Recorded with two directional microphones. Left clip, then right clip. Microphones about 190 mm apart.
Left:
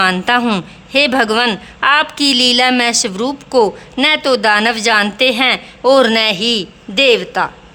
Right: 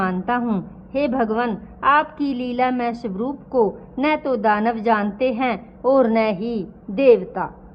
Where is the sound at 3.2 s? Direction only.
35° left (ahead or behind).